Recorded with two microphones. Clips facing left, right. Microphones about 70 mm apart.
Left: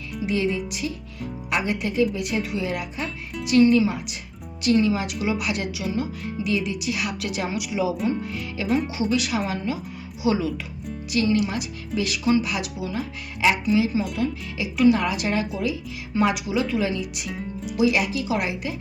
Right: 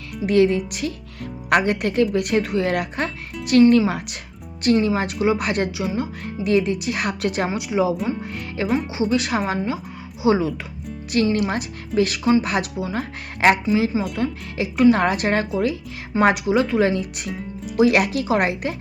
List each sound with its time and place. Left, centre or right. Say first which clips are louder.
0.1 s speech: right 7 dB; right
4.6 s speech: right 2 dB; right
6.2 s speech: right 9 dB; right
8.3 s speech: right 2 dB; right
8.6 s speech: right 1 dB; centre
9.0 s speech: right 3 dB; right
17.3 s music: even; centre
17.7 s speech: right 5 dB; right